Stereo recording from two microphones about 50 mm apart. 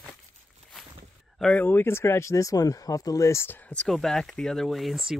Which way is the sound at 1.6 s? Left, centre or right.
Left.